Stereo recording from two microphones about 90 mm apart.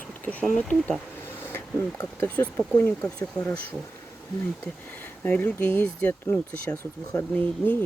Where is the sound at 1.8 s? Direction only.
20° left (ahead or behind).